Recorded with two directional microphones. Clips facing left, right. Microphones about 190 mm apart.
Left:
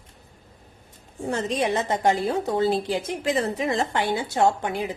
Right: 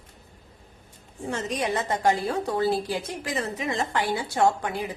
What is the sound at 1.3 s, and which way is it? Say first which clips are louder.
A woman's voice: left 3 dB; 25° left (ahead or behind).